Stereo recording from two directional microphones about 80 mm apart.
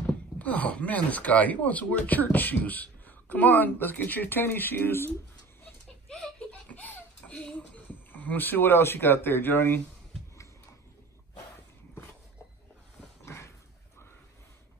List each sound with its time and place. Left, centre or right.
0.0 s speech: centre
6.7 s speech: left
13.2 s a sound: left